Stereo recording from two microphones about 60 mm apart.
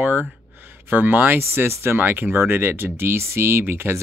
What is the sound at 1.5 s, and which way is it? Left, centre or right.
Speech, right.